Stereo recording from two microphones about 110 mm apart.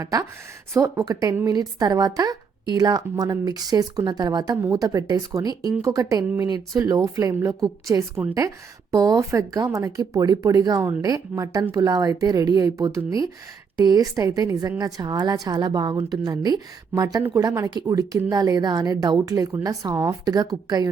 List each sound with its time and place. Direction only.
0.0 s a woman's voice: 30° right (ahead or behind)